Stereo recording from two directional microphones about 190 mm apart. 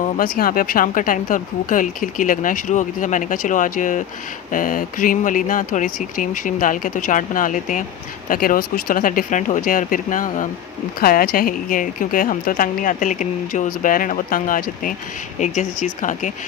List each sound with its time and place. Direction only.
0.2 s a woman's voice: 50° left (ahead or behind)